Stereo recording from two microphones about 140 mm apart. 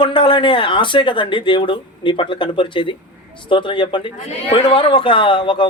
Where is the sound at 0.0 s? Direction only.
35° left (ahead or behind).